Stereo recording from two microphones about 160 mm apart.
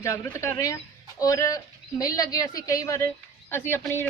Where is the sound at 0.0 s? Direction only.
20° left (ahead or behind).